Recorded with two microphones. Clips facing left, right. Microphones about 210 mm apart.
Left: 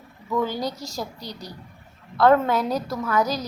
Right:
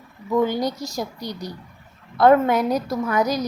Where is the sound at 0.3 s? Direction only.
15° right (ahead or behind).